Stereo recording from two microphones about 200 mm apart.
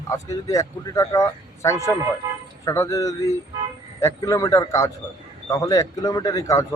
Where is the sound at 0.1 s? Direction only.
15° left (ahead or behind).